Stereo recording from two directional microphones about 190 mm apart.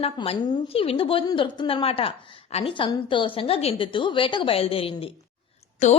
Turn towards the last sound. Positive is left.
turn(degrees=40)  # may be behind; listen again after turning